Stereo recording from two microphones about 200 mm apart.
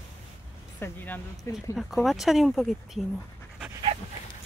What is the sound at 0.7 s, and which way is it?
Speech, 10° left (ahead or behind).